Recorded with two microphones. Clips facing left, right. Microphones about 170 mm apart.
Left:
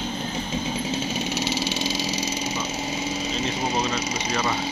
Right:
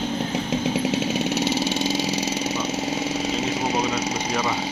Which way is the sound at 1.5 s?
55° right (ahead or behind).